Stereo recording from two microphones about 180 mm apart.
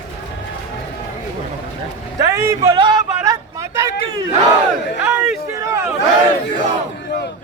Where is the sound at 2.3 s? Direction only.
15° right (ahead or behind).